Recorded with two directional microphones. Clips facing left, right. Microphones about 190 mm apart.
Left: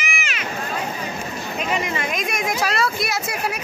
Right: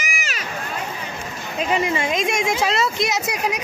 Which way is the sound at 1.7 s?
25° right (ahead or behind).